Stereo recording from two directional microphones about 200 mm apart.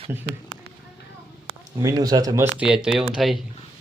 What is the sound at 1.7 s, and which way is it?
Speech, 20° right (ahead or behind).